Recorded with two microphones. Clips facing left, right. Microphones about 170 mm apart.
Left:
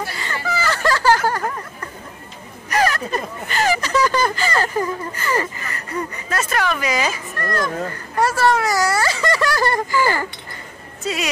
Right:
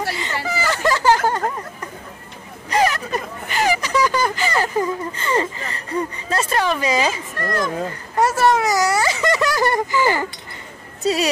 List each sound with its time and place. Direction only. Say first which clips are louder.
0.1 s a sound: right 1 dB; 20° right (ahead or behind)
2.7 s speech: right 1 dB; 20° right (ahead or behind)
11.0 s speech: right 5 dB; 35° right (ahead or behind)